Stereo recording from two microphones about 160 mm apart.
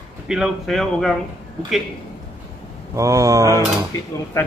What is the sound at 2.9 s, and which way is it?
Speech, 20° right (ahead or behind).